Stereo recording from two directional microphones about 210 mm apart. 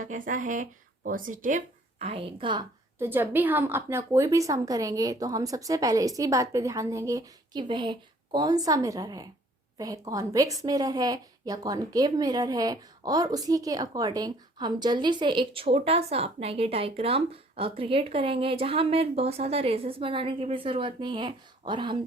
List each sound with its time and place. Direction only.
0.0 s speech: 40° right (ahead or behind); by 2.6 s 25° right (ahead or behind)
3.0 s a woman's voice: 10° right (ahead or behind)